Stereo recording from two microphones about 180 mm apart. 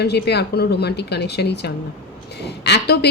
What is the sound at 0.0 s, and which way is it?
A woman's voice, 65° left (ahead or behind).